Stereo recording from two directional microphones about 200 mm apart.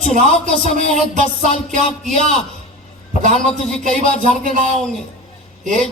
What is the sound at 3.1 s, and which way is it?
A man's voice, 40° right (ahead or behind).